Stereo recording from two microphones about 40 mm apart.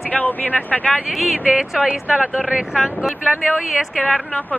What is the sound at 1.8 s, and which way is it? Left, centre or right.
Speech, right.